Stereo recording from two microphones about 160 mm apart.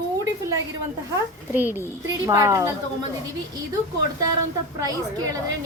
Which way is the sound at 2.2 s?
20° right (ahead or behind).